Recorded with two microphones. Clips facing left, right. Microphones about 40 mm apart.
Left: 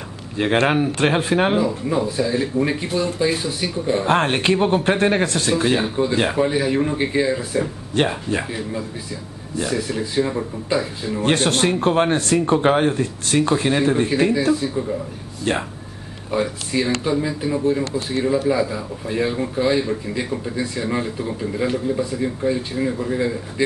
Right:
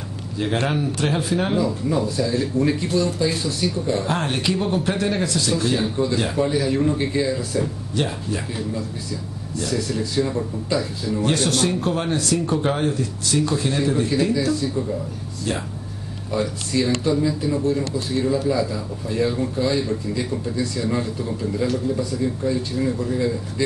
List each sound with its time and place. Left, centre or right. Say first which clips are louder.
0.4 s a man's voice: left 5 dB; left
1.6 s speech: left 1 dB; left
4.1 s a man's voice: left 5 dB; left
5.5 s speech: left 4 dB; left
7.9 s a man's voice: left 6 dB; left
8.5 s a man's voice: even; left
15.5 s a man's voice: left 4 dB; left
16.3 s speech: left 2 dB; left